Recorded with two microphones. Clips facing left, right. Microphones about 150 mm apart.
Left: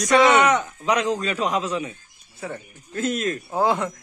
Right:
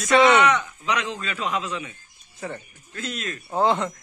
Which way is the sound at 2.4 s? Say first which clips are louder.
Left 1 dB; 5° left (ahead or behind).